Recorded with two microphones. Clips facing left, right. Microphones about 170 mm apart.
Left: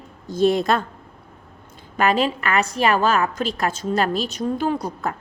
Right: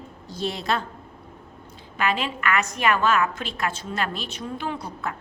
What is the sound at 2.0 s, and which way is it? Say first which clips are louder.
A woman's voice: left 6 dB; 40° left (ahead or behind).